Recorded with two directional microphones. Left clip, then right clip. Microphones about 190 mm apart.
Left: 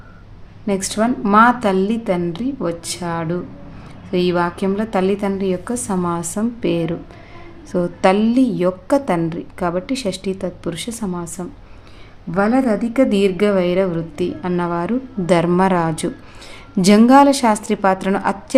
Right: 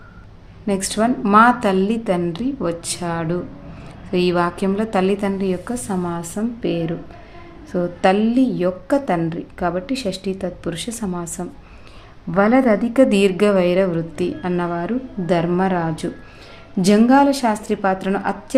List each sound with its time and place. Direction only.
0.7 s a woman's voice: 10° left (ahead or behind)